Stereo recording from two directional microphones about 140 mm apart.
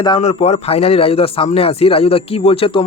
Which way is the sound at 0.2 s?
50° left (ahead or behind).